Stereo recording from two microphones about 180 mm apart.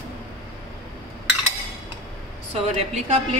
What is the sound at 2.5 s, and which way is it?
Speech, 35° right (ahead or behind).